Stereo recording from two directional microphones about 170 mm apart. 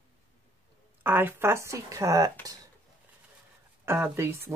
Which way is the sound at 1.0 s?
10° right (ahead or behind).